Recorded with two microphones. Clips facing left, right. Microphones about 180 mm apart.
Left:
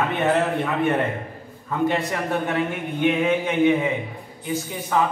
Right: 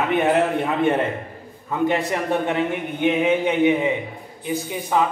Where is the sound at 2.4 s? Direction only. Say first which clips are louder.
Right 2 dB; 20° right (ahead or behind).